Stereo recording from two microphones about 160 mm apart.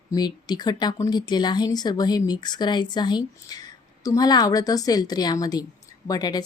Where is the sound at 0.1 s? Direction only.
25° left (ahead or behind).